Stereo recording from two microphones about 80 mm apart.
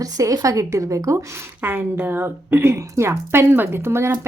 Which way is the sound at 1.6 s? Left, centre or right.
Right.